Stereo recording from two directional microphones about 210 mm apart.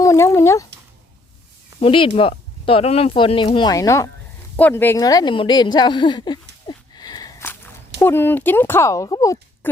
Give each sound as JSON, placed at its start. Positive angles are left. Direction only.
{"t": 0.0, "sound": "speech", "side_deg": 15}
{"t": 1.8, "sound": "speech", "side_deg": 25}